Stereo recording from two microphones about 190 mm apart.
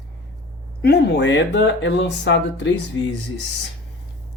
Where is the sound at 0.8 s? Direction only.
60° left (ahead or behind).